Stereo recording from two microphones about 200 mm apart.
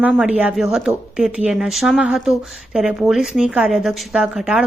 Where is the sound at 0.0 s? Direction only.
5° right (ahead or behind).